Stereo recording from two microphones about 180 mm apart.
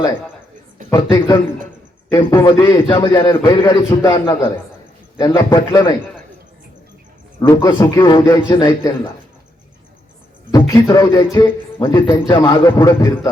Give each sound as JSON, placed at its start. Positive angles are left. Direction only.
{"t": 0.9, "sound": "a man's voice", "side_deg": 20}
{"t": 7.4, "sound": "a man's voice", "side_deg": 15}
{"t": 10.5, "sound": "a man's voice", "side_deg": 20}